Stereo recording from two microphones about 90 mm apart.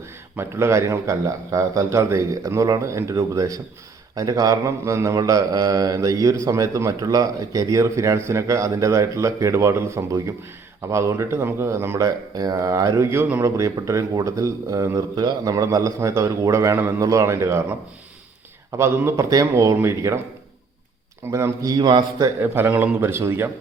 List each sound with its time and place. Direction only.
0.3 s speech: 30° right (ahead or behind)
18.8 s speech: 30° right (ahead or behind)
21.2 s a man's voice: 30° right (ahead or behind); by 22.0 s 55° right (ahead or behind)
22.2 s speech: 30° right (ahead or behind)